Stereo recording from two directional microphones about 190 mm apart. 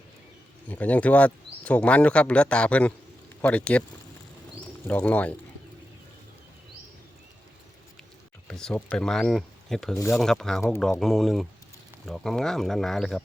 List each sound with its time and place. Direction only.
0.7 s speech: 10° left (ahead or behind)
4.9 s speech: 10° left (ahead or behind)
8.4 s speech: 5° left (ahead or behind)